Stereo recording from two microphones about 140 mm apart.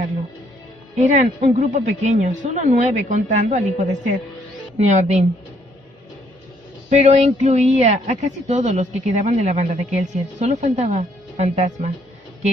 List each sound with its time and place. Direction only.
0.9 s a woman's voice: 55° right (ahead or behind)
6.9 s a woman's voice: 50° right (ahead or behind)